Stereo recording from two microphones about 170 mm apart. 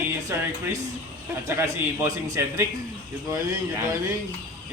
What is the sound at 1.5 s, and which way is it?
A man's voice, 15° right (ahead or behind).